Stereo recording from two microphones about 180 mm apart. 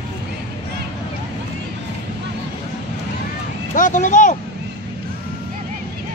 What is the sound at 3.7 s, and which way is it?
Vehicle, 45° left (ahead or behind).